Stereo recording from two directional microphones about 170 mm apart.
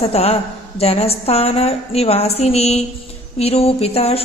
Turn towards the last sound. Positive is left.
turn(degrees=35)  # may be behind; listen again after turning